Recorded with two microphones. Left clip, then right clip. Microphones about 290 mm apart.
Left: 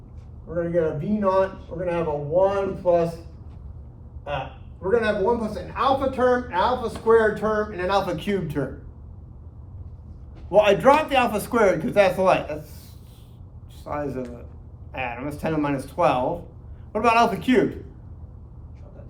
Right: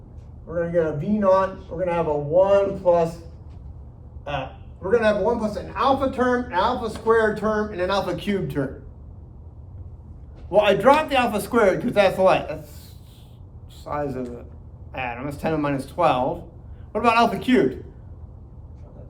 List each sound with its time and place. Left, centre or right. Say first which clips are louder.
0.4 s a man's voice: right 1 dB; centre
4.8 s a man's voice: right 2 dB; centre
10.5 s a man's voice: even; centre
13.8 s a man's voice: right 2 dB; centre